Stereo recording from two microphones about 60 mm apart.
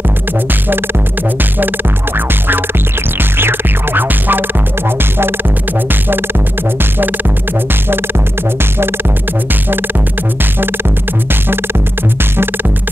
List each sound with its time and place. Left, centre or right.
2.1 s music: right
6.8 s music: right